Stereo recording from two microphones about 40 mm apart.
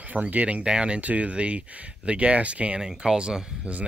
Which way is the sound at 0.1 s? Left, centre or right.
Right.